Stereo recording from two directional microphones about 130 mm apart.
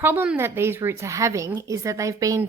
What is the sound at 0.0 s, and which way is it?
Speech, 15° right (ahead or behind).